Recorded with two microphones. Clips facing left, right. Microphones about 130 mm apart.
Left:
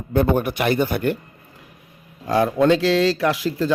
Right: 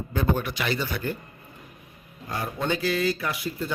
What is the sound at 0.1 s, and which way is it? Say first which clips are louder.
A man's voice: left 8 dB; 55° left (ahead or behind).